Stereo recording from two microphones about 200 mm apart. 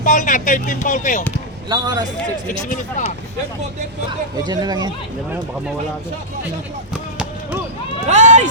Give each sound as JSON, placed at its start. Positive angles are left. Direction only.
{"t": 0.0, "sound": "speech", "side_deg": 40}
{"t": 1.7, "sound": "speech", "side_deg": -20}
{"t": 4.4, "sound": "speech", "side_deg": -20}
{"t": 6.9, "sound": "basketball bounce", "side_deg": -5}
{"t": 8.0, "sound": "speech", "side_deg": -35}